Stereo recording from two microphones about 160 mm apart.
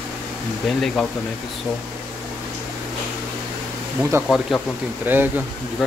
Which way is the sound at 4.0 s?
15° right (ahead or behind).